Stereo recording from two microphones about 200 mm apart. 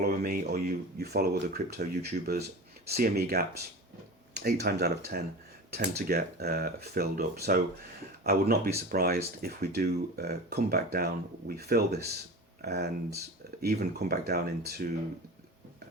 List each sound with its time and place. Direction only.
0.0 s speech: 50° right (ahead or behind)